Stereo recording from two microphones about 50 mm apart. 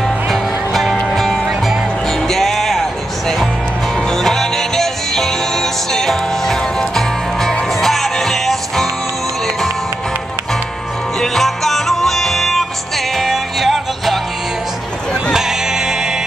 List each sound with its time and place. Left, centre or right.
0.0 s music: centre
4.1 s music: centre
11.1 s music: centre
15.3 s music: centre